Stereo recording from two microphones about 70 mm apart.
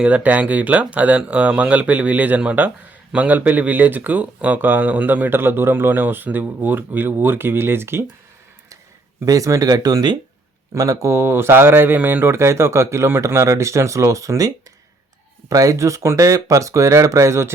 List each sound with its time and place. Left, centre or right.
0.0 s speech: right
9.2 s speech: right
10.8 s speech: right
11.1 s speech: right